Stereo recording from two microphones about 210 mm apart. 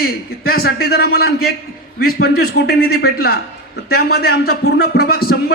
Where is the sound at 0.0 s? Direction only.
45° left (ahead or behind).